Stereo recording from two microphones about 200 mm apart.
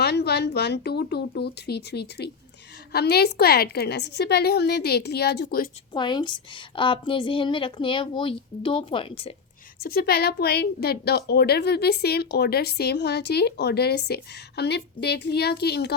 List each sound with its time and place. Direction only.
0.0 s a woman's voice: 55° left (ahead or behind)
5.9 s a woman's voice: 20° left (ahead or behind)
9.8 s a woman's voice: 50° left (ahead or behind)